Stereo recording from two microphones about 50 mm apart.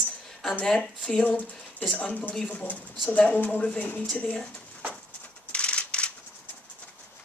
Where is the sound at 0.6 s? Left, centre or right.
Centre.